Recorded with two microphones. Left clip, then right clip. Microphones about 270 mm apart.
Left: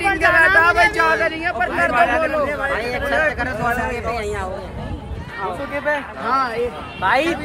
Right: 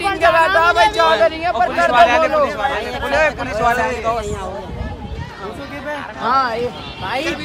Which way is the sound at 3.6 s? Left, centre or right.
Right.